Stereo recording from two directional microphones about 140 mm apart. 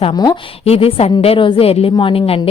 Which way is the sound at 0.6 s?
45° left (ahead or behind).